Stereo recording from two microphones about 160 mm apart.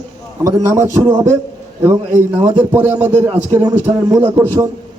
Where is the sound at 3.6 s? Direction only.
25° right (ahead or behind).